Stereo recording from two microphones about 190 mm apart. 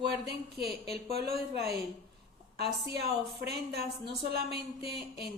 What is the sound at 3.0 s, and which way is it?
A woman's voice, 55° right (ahead or behind).